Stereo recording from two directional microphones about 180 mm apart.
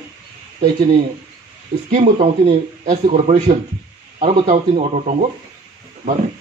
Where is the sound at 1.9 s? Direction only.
35° right (ahead or behind).